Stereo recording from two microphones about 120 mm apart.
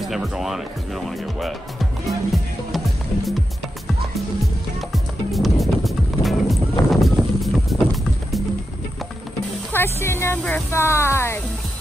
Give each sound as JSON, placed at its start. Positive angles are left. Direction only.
{"t": 0.0, "sound": "speech", "side_deg": 0}
{"t": 4.9, "sound": "music", "side_deg": 0}
{"t": 9.7, "sound": "speech", "side_deg": 20}